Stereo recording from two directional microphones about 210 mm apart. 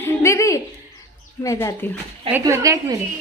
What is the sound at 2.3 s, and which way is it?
Speech, 15° right (ahead or behind).